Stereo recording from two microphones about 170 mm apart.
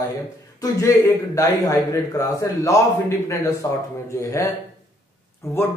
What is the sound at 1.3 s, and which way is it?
A man's voice, 15° left (ahead or behind).